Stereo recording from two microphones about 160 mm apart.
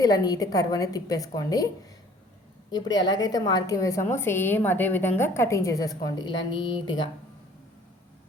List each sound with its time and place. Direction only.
0.0 s a woman's voice: 25° left (ahead or behind)